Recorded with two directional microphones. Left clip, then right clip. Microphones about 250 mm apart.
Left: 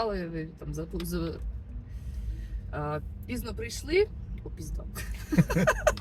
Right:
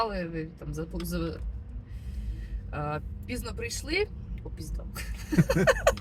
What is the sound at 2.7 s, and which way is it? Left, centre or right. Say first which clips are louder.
Speech: even; centre.